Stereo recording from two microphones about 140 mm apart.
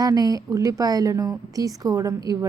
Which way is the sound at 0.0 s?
25° right (ahead or behind).